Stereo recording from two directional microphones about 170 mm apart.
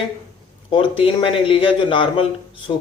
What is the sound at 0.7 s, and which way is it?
Speech, 30° left (ahead or behind).